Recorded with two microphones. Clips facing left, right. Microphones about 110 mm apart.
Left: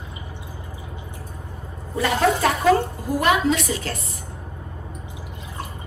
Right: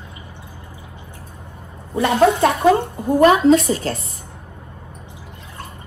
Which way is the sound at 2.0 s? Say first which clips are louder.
Right 5 dB; 25° right (ahead or behind).